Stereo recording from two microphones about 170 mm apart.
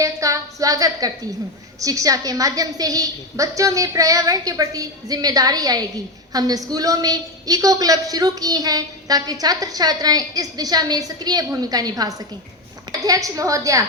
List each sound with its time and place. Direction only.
0.0 s a woman's voice: 20° right (ahead or behind)